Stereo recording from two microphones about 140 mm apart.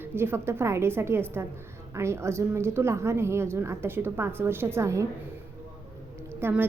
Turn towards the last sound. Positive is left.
turn(degrees=-15)  # may be behind; listen again after turning